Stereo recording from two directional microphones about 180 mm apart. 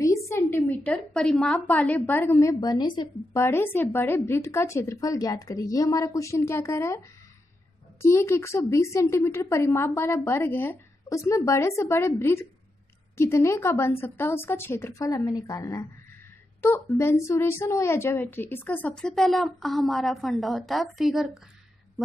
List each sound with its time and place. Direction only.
0.0 s a woman's voice: 15° left (ahead or behind)
3.4 s a woman's voice: 15° left (ahead or behind)